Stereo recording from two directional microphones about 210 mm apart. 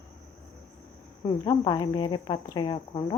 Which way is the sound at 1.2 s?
20° left (ahead or behind).